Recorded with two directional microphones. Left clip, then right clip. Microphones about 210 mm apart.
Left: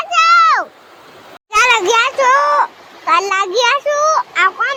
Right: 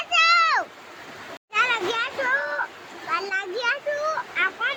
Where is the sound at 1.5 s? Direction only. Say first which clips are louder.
Left 11 dB; 25° left (ahead or behind).